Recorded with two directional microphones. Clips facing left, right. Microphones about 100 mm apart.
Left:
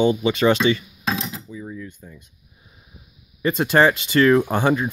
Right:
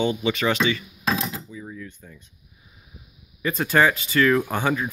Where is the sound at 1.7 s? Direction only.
15° left (ahead or behind).